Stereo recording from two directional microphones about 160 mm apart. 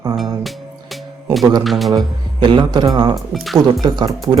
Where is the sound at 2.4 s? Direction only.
30° right (ahead or behind).